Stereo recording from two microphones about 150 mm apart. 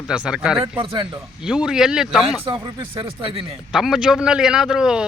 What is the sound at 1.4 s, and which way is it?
Speech, 5° right (ahead or behind).